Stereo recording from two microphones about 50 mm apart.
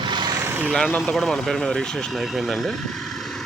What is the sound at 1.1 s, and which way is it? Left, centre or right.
Speech, centre.